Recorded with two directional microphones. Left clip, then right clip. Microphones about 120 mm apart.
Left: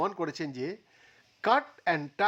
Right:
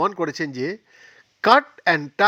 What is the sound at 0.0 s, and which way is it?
Speech, 25° right (ahead or behind).